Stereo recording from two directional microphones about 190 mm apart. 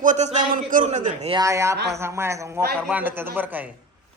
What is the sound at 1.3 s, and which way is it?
A man's voice, 15° right (ahead or behind).